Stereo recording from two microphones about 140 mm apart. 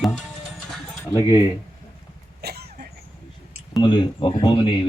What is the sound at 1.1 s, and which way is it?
Speech, 25° left (ahead or behind).